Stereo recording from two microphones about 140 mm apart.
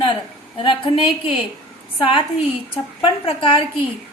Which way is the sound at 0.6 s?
35° left (ahead or behind).